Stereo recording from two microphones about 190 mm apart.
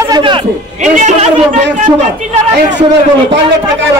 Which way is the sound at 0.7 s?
40° right (ahead or behind).